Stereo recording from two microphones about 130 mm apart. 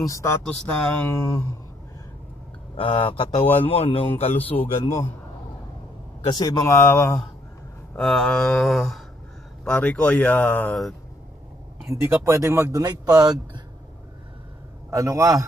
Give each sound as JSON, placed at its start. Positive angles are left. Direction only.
{"t": 0.0, "sound": "speech", "side_deg": 20}
{"t": 0.5, "sound": "speech", "side_deg": 10}
{"t": 2.7, "sound": "speech", "side_deg": 40}
{"t": 6.2, "sound": "speech", "side_deg": 35}
{"t": 7.9, "sound": "speech", "side_deg": 5}
{"t": 12.0, "sound": "speech", "side_deg": -15}
{"t": 14.9, "sound": "a man's voice", "side_deg": -25}